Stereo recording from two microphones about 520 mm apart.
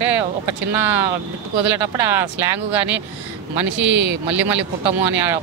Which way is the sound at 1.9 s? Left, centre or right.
Centre.